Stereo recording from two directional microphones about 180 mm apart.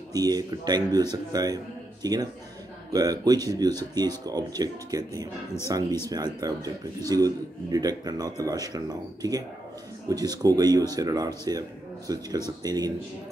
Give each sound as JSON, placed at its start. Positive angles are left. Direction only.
{"t": 0.1, "sound": "speech", "side_deg": -20}